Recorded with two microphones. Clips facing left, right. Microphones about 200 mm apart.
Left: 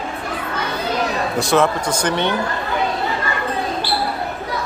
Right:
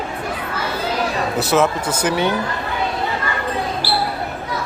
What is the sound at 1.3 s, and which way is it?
Speech, 5° right (ahead or behind).